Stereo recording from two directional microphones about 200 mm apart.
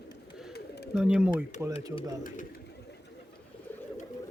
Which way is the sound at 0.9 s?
5° right (ahead or behind).